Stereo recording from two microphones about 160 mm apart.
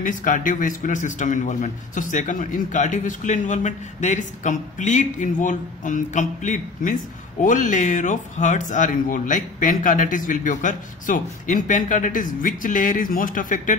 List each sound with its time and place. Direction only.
0.0 s a man's voice: 55° left (ahead or behind)